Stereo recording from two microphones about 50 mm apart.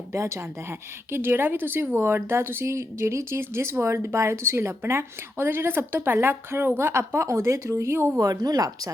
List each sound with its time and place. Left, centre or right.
0.1 s speech: right
0.3 s a woman's voice: right
1.3 s a woman's voice: right